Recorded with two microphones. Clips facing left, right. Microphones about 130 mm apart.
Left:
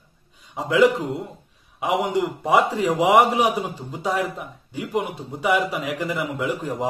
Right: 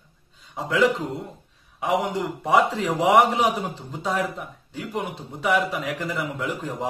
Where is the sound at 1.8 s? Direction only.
15° left (ahead or behind).